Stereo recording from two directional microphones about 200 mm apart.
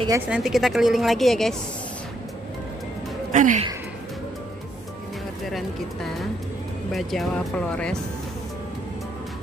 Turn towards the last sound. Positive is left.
turn(degrees=5)  # may be behind; listen again after turning